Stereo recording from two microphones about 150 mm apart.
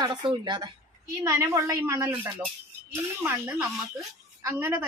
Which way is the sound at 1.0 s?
20° right (ahead or behind).